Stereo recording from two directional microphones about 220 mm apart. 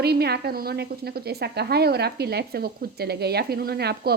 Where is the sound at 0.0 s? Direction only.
45° right (ahead or behind).